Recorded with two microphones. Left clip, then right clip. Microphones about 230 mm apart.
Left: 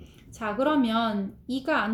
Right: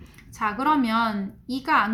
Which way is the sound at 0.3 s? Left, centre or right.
Right.